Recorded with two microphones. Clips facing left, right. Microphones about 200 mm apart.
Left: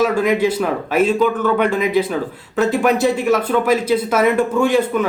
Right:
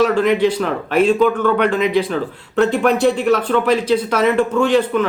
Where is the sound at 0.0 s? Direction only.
10° left (ahead or behind).